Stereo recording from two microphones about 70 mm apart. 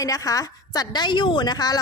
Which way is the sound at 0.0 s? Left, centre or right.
Left.